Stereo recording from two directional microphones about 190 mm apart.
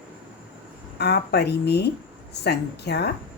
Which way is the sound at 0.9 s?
60° left (ahead or behind).